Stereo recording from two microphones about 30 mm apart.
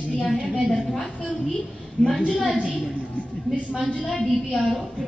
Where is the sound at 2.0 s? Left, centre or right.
Left.